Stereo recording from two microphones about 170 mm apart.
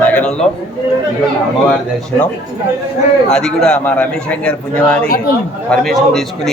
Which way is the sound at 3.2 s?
5° left (ahead or behind).